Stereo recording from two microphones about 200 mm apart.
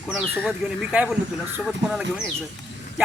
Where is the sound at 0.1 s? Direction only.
Centre (ahead or behind).